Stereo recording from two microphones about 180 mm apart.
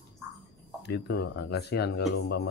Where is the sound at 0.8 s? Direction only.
65° left (ahead or behind).